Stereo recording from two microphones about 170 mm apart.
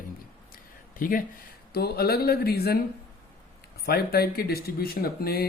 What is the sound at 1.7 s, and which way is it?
Speech, 65° left (ahead or behind).